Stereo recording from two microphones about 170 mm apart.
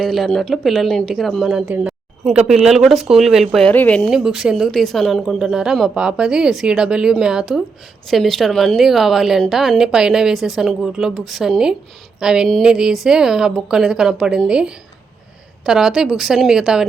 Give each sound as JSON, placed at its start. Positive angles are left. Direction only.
{"t": 0.0, "sound": "a woman's voice", "side_deg": 0}
{"t": 4.1, "sound": "a woman's voice", "side_deg": -5}